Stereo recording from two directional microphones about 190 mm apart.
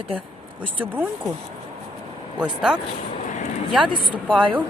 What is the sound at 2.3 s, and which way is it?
Speech, 5° right (ahead or behind).